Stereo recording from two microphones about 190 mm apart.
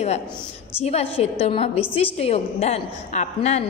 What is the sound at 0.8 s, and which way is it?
A woman's voice, 35° left (ahead or behind).